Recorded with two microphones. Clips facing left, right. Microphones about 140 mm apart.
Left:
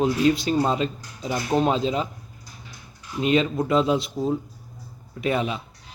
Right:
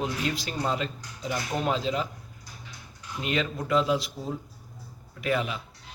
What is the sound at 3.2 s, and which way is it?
Speech, 20° left (ahead or behind).